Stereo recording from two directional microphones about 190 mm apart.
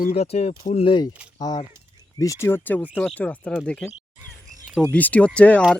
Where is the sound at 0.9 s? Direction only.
25° left (ahead or behind).